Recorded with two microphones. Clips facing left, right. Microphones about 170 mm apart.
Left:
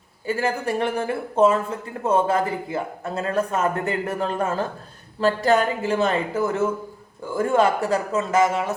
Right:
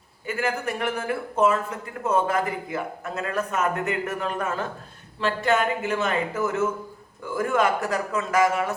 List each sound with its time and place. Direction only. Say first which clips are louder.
0.3 s speech: left 3 dB; 30° left (ahead or behind)